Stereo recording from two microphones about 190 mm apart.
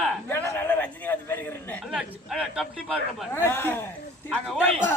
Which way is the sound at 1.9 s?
5° right (ahead or behind).